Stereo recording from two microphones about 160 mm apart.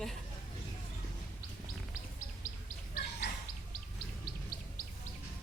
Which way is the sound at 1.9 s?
55° left (ahead or behind).